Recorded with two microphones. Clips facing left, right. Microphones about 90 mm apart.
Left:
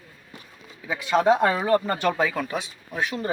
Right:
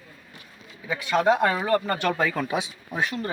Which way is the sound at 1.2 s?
25° left (ahead or behind).